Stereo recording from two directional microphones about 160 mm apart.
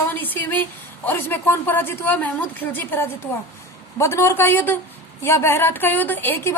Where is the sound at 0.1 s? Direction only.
10° left (ahead or behind).